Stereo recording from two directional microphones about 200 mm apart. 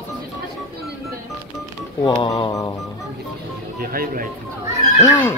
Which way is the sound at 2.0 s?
20° left (ahead or behind).